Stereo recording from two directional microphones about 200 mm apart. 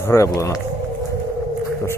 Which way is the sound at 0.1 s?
15° left (ahead or behind).